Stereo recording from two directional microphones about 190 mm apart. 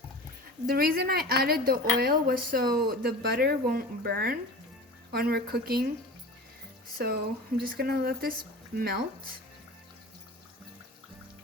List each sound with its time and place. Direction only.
0.7 s speech: 55° right (ahead or behind)
7.0 s speech: 55° right (ahead or behind)